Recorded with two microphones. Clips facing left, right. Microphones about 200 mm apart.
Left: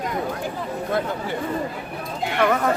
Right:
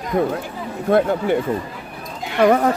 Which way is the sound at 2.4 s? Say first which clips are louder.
Right 6 dB; 35° right (ahead or behind).